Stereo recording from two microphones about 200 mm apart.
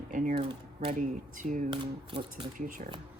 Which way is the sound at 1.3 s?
40° right (ahead or behind).